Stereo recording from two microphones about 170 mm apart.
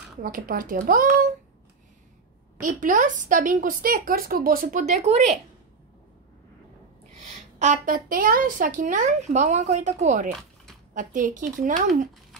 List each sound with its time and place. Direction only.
0.2 s a child's voice: 55° right (ahead or behind)
2.6 s a woman's voice: 50° right (ahead or behind)
7.2 s a woman's voice: 45° right (ahead or behind)